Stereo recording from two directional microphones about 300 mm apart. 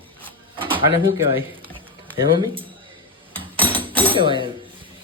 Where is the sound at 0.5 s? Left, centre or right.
Centre.